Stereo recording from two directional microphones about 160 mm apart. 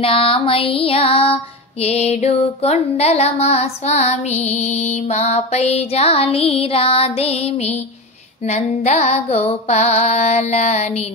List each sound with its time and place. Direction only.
0.0 s female singing: 35° left (ahead or behind)
8.5 s music: 45° left (ahead or behind)